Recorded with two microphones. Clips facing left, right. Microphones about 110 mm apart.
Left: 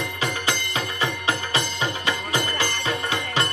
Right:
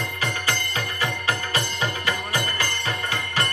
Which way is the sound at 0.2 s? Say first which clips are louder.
Left 1 dB; 20° left (ahead or behind).